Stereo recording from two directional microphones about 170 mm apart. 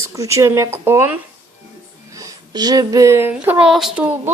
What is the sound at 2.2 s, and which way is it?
A woman's voice, 20° right (ahead or behind).